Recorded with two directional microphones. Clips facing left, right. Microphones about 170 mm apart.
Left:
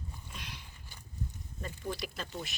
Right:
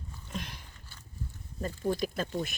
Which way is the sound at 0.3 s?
50° right (ahead or behind).